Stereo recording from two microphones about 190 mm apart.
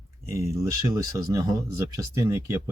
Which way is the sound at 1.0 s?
15° right (ahead or behind).